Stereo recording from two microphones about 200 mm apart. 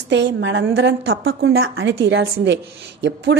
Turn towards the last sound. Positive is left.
turn(degrees=-65)  # may be behind; listen again after turning